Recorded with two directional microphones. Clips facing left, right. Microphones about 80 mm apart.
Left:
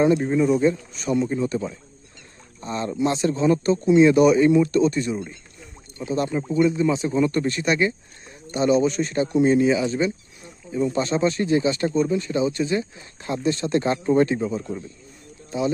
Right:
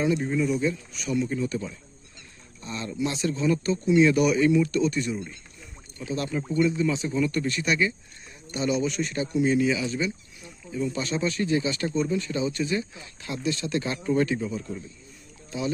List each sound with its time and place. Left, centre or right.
0.2 s speech: left